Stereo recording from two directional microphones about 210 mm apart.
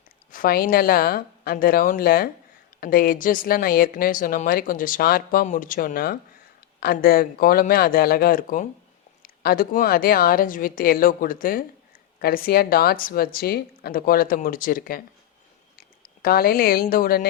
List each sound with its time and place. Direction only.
0.3 s a woman's voice: 45° left (ahead or behind)
16.2 s a woman's voice: 45° left (ahead or behind)